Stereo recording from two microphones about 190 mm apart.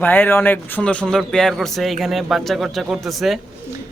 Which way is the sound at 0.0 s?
10° left (ahead or behind).